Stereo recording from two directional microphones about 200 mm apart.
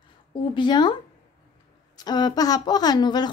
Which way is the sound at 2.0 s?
20° left (ahead or behind).